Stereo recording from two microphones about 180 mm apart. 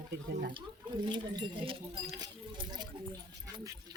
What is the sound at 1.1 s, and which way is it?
Speech, 25° right (ahead or behind).